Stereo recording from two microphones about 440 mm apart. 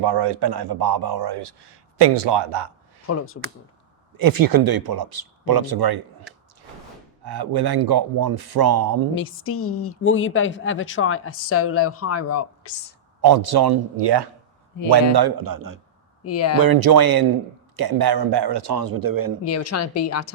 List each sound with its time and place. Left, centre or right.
0.0 s speech: right
3.1 s speech: left
4.2 s speech: right
7.3 s speech: right
9.1 s speech: left
13.2 s speech: right
16.2 s a woman's voice: left
16.6 s speech: right
19.5 s a woman's voice: left